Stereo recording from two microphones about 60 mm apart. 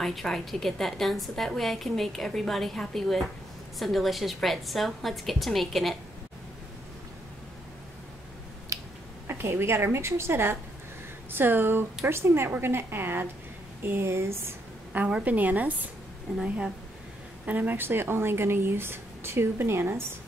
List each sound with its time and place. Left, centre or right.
0.0 s a woman's voice: centre
8.7 s a sound: right
9.3 s a woman's voice: right
14.9 s a woman's voice: centre
16.4 s speech: centre
17.5 s speech: right